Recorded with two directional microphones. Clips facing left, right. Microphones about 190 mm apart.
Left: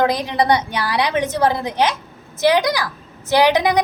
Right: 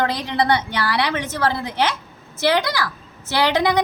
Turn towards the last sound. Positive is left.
turn(degrees=15)  # may be behind; listen again after turning